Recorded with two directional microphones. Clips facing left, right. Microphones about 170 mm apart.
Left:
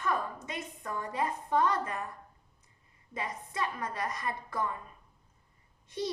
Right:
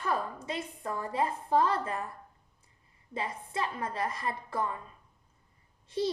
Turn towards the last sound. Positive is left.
turn(degrees=-30)  # may be behind; listen again after turning